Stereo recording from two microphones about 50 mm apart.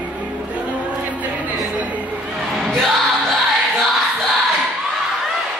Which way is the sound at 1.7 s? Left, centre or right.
Right.